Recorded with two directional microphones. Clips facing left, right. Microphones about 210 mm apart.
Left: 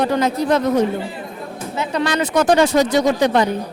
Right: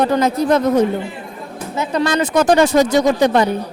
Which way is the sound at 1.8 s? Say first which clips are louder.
Right 3 dB; 45° right (ahead or behind).